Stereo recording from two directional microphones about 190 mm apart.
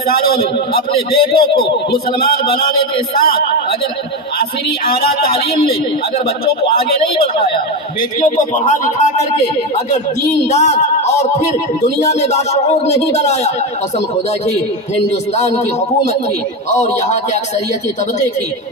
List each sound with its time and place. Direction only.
0.1 s a man's voice: 55° left (ahead or behind)
1.6 s a man's voice: 55° left (ahead or behind)
5.0 s speech: 30° left (ahead or behind)
8.2 s speech: 40° left (ahead or behind)
10.5 s speech: 35° left (ahead or behind)
15.3 s speech: 35° left (ahead or behind)